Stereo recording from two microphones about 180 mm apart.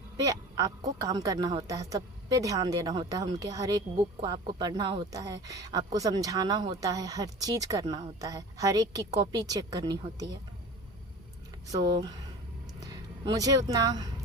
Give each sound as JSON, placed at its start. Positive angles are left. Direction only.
{"t": 0.2, "sound": "a woman's voice", "side_deg": -20}
{"t": 11.7, "sound": "a woman's voice", "side_deg": -20}
{"t": 13.3, "sound": "a woman's voice", "side_deg": -20}